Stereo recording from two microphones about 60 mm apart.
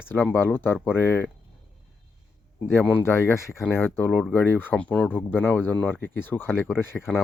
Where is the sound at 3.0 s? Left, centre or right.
Left.